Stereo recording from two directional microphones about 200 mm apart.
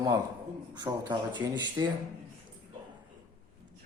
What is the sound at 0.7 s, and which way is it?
Speech, 20° right (ahead or behind).